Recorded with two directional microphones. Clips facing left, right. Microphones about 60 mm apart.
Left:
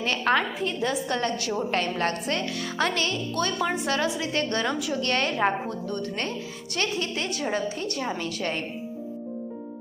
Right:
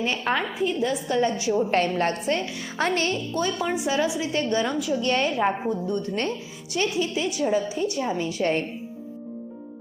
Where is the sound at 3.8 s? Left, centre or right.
Centre.